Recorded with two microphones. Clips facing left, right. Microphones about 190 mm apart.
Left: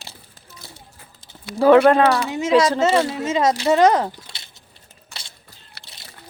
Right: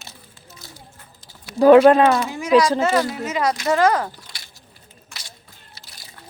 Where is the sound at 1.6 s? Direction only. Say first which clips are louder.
Right 2 dB; 15° right (ahead or behind).